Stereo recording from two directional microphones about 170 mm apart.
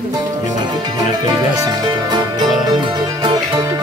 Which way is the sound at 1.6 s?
25° right (ahead or behind).